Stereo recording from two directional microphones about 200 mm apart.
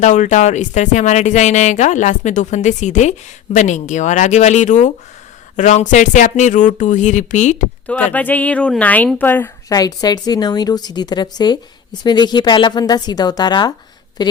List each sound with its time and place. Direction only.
0.0 s speech: 35° left (ahead or behind)
7.9 s speech: 5° left (ahead or behind)